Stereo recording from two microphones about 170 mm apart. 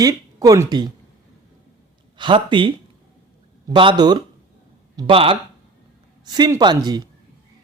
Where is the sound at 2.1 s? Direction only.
30° right (ahead or behind).